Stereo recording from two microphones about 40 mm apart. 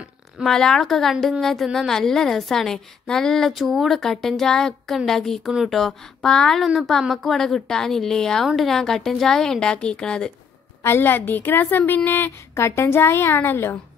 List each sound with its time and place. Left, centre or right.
0.5 s a woman's voice: centre
6.2 s a woman's voice: centre
6.8 s a woman's voice: centre; by 10.3 s left
10.8 s a woman's voice: left